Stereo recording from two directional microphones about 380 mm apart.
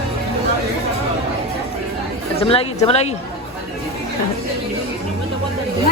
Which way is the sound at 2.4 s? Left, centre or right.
Centre.